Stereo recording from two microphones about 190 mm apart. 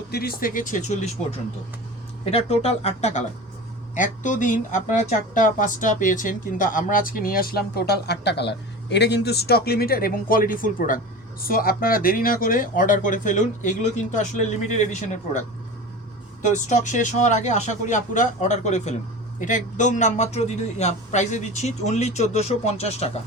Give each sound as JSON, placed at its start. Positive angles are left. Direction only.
{"t": 0.1, "sound": "a man's voice", "side_deg": 55}